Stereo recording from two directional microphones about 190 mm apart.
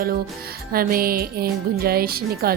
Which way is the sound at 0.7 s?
50° right (ahead or behind).